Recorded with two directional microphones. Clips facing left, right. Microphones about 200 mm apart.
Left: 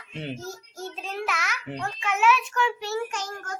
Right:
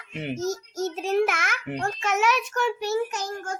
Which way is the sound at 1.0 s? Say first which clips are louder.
Right 8 dB; 45° right (ahead or behind).